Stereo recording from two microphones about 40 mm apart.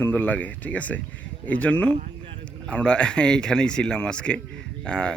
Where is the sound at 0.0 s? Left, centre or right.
Left.